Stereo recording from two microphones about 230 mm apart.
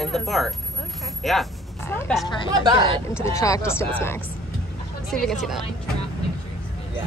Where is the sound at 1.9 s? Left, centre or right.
Centre.